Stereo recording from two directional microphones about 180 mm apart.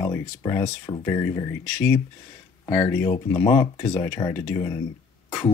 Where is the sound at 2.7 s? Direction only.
15° left (ahead or behind).